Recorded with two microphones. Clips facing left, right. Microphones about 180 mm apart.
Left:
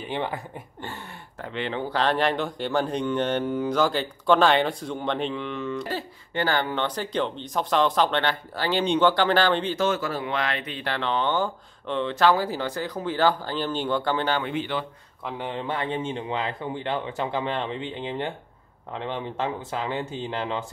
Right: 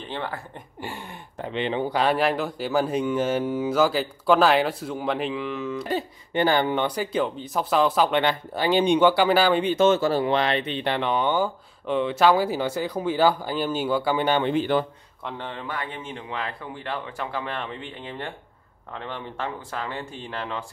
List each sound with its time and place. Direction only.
0.0 s speech: 15° left (ahead or behind)
0.7 s speech: 10° right (ahead or behind)
5.9 s speech: 20° right (ahead or behind)
14.4 s speech: 40° right (ahead or behind)
15.2 s speech: 15° left (ahead or behind)
15.6 s speech: 25° left (ahead or behind)